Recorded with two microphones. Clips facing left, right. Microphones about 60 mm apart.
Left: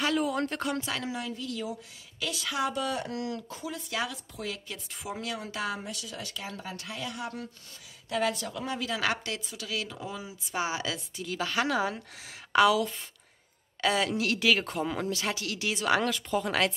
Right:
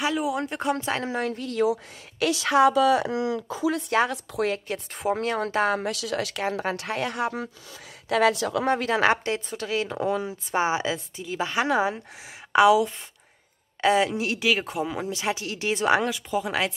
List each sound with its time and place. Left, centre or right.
0.0 s speech: centre
0.7 s a woman's voice: right
1.1 s speech: right
1.6 s speech: right
3.9 s speech: right
5.9 s speech: right
6.4 s speech: right
8.1 s a woman's voice: right
8.6 s a woman's voice: right
9.9 s speech: right
10.5 s speech: right
16.1 s speech: centre